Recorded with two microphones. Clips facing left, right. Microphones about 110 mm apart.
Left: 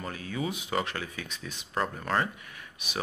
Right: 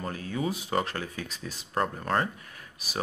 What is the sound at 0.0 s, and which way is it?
Speech, 35° right (ahead or behind).